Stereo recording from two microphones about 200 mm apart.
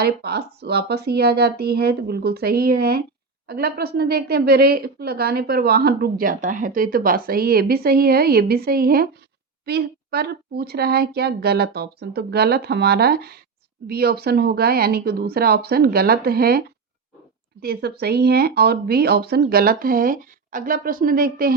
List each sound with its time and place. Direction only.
0.0 s a woman's voice: 55° right (ahead or behind)